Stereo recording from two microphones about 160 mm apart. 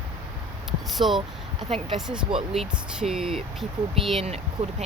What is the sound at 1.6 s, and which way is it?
Speech, 35° right (ahead or behind).